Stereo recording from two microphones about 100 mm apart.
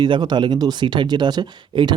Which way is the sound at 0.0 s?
45° right (ahead or behind).